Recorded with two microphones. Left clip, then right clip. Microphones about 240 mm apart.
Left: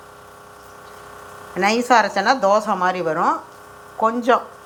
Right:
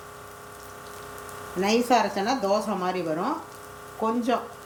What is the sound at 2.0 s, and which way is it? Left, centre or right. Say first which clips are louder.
Speech: left 8 dB; centre.